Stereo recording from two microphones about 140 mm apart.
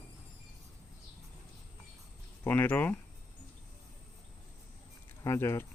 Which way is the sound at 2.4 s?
15° left (ahead or behind).